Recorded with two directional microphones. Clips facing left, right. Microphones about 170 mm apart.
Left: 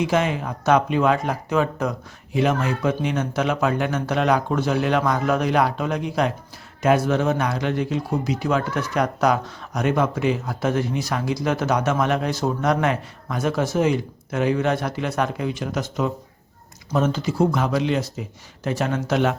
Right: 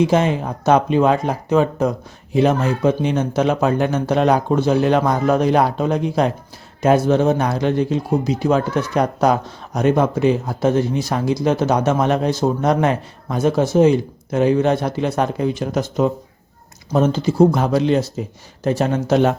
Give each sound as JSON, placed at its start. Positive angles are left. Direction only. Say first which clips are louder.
{"t": 0.0, "sound": "speech", "louder": "right 5 dB", "side_deg": -30}